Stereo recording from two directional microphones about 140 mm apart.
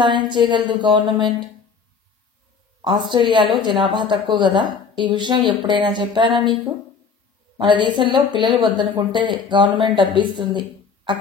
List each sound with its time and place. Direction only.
0.0 s a woman's voice: 35° right (ahead or behind)
2.8 s a woman's voice: 35° right (ahead or behind)